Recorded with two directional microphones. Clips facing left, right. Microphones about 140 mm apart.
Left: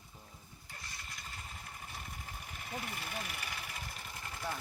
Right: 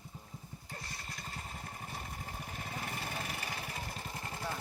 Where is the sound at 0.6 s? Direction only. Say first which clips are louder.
Right 3 dB; 35° right (ahead or behind).